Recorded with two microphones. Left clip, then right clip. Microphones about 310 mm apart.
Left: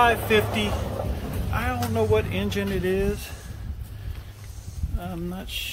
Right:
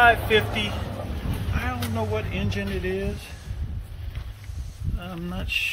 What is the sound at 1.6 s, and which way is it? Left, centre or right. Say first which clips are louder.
Speech: left 5 dB; centre.